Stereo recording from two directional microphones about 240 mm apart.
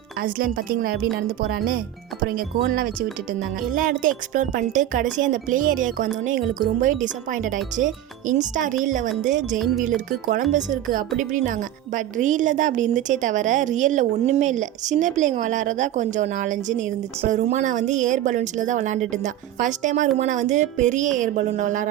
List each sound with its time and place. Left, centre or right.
0.2 s speech: right